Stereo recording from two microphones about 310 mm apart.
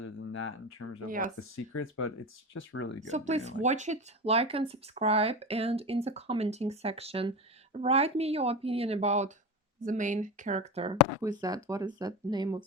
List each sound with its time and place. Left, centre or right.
0.0 s a sound: left
1.0 s speech: right
1.4 s speech: left
3.1 s speech: right